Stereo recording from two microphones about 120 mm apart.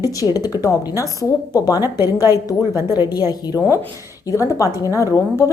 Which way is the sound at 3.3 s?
30° left (ahead or behind).